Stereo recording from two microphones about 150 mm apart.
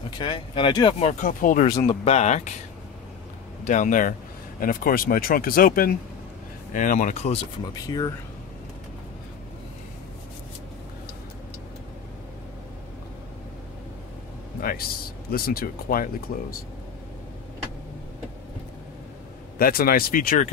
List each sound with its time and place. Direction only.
0.2 s speech: 35° left (ahead or behind)
0.9 s speech: 55° left (ahead or behind)
1.8 s speech: 45° left (ahead or behind)
3.6 s speech: 55° left (ahead or behind)
6.7 s speech: 60° left (ahead or behind)
7.7 s speech: 25° left (ahead or behind)
14.6 s speech: 75° left (ahead or behind)
15.3 s speech: 90° left
19.6 s speech: 80° left